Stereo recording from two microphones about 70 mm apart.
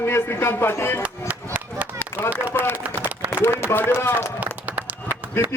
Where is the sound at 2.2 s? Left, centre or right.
Left.